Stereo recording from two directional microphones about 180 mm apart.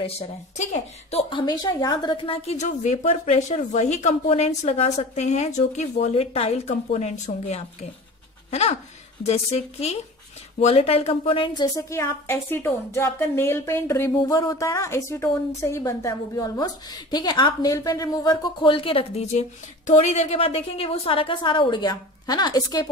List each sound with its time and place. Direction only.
0.6 s a woman's voice: 40° left (ahead or behind)
1.3 s a woman's voice: 25° left (ahead or behind); by 7.9 s 40° left (ahead or behind)
8.5 s a sound: 35° left (ahead or behind)
9.2 s a woman's voice: 35° left (ahead or behind)